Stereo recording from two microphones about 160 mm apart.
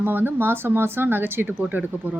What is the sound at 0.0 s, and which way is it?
Speech, 10° right (ahead or behind).